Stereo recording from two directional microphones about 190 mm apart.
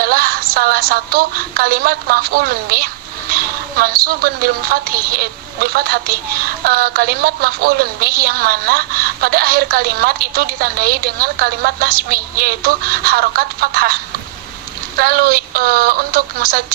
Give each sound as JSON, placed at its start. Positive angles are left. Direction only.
{"t": 0.0, "sound": "a woman's voice", "side_deg": -50}
{"t": 14.9, "sound": "a woman's voice", "side_deg": -50}